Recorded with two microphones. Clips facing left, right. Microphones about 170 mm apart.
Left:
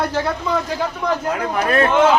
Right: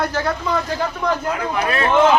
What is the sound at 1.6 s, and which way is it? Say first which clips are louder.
Speech: left 6 dB; 45° left (ahead or behind).